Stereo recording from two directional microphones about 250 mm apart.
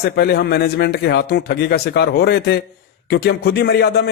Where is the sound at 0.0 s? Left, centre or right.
Left.